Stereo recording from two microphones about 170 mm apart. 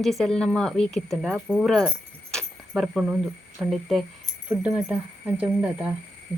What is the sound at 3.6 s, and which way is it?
Speech, centre (ahead or behind).